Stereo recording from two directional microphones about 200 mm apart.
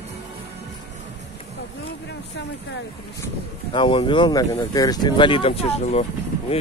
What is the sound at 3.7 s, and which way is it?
Speech, 25° left (ahead or behind).